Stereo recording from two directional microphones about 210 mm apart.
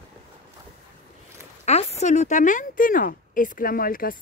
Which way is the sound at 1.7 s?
30° left (ahead or behind).